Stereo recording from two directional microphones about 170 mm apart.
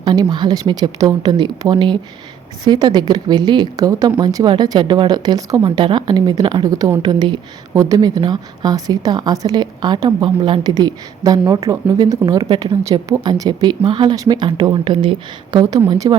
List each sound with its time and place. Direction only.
0.0 s speech: 25° right (ahead or behind)